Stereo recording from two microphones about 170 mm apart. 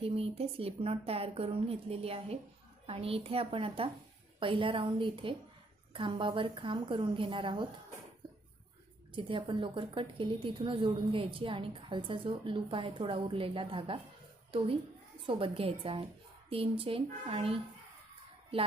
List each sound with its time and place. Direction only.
0.0 s a woman's voice: 35° right (ahead or behind)
9.1 s a woman's voice: 30° right (ahead or behind)
15.3 s a woman's voice: 30° right (ahead or behind)